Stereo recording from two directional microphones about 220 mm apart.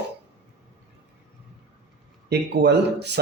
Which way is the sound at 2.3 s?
50° right (ahead or behind).